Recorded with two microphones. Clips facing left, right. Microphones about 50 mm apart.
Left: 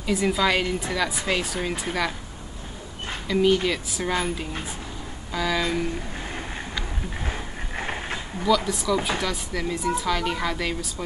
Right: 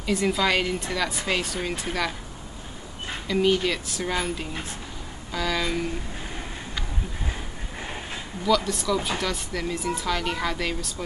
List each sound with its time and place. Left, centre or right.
0.0 s speech: centre
3.3 s speech: centre
7.7 s mechanisms: left
8.5 s speech: centre